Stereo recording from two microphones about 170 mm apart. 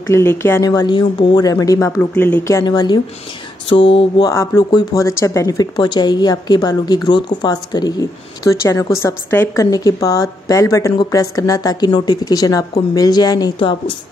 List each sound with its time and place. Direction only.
0.1 s speech: 15° left (ahead or behind)
3.9 s mantra: 30° left (ahead or behind)
4.3 s speech: 15° left (ahead or behind)